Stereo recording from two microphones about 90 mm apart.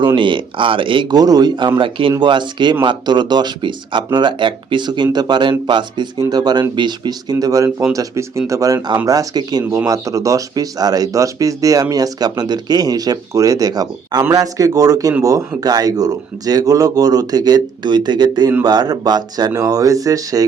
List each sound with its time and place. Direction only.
0.2 s speech: 65° right (ahead or behind)
1.1 s speech: 45° right (ahead or behind)
1.8 s speech: 70° right (ahead or behind); by 14.2 s 45° right (ahead or behind)
14.2 s speech: 35° right (ahead or behind)